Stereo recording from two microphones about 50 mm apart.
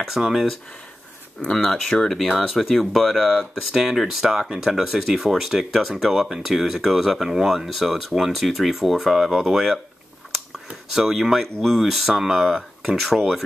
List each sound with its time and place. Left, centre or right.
0.0 s speech: centre
1.4 s speech: centre